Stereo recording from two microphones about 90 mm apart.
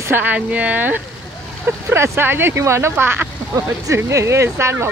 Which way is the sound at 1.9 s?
30° right (ahead or behind).